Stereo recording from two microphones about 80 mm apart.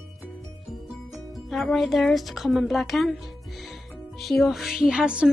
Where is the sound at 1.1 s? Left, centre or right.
Centre.